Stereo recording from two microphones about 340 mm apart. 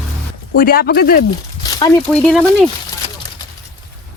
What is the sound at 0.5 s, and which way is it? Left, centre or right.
Speech, left.